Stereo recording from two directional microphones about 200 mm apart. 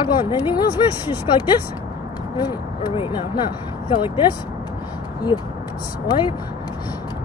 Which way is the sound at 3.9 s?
25° left (ahead or behind).